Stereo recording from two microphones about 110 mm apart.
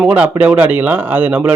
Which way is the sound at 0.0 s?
10° right (ahead or behind).